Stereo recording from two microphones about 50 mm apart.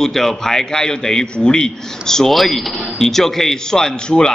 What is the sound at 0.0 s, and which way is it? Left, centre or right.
A man's voice, centre.